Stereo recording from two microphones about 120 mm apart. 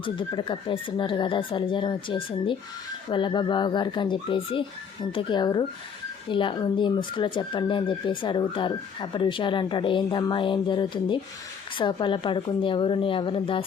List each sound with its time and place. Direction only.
0.0 s speech: 40° left (ahead or behind)